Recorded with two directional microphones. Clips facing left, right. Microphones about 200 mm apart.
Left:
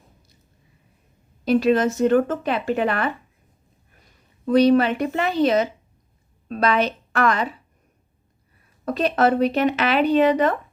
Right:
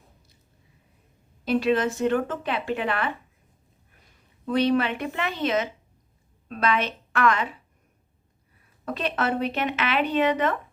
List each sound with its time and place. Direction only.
1.5 s speech: 40° left (ahead or behind)
4.4 s a woman's voice: 40° left (ahead or behind)
8.8 s speech: 40° left (ahead or behind)